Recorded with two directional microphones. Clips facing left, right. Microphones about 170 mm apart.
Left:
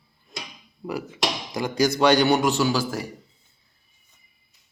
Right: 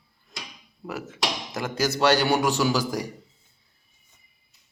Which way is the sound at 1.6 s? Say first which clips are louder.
Left 3 dB; 5° right (ahead or behind).